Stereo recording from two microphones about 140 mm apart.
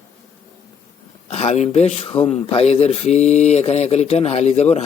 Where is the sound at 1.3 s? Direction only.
50° left (ahead or behind).